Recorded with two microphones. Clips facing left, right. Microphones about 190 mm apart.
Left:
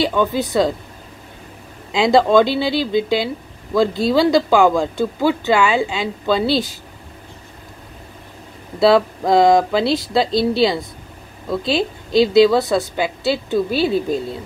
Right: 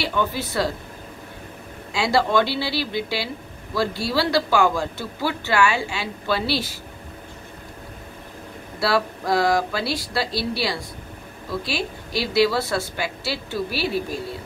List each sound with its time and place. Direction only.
0.0 s speech: 15° left (ahead or behind)
2.0 s speech: 20° left (ahead or behind)
8.7 s speech: 20° left (ahead or behind)